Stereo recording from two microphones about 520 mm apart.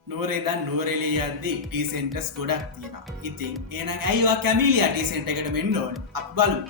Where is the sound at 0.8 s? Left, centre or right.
Right.